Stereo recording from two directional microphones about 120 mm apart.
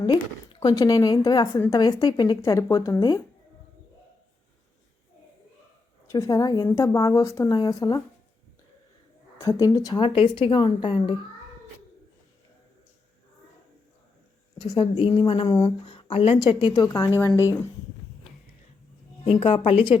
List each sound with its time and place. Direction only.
0.6 s a woman's voice: 30° left (ahead or behind)
6.1 s a woman's voice: 25° left (ahead or behind)
9.4 s a woman's voice: 25° left (ahead or behind)
10.0 s speech: 45° left (ahead or behind)
14.6 s a woman's voice: 35° left (ahead or behind)
15.4 s a woman's voice: 30° left (ahead or behind)
15.8 s a woman's voice: 45° left (ahead or behind); by 17.5 s 25° left (ahead or behind)
19.2 s speech: 50° left (ahead or behind)